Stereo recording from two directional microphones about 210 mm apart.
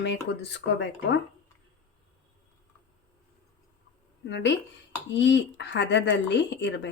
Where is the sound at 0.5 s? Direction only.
55° left (ahead or behind).